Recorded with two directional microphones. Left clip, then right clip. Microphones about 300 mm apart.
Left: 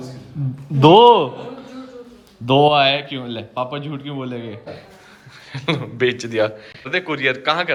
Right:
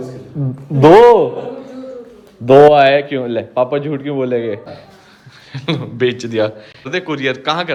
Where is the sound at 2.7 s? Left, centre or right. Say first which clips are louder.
Right 6 dB; centre.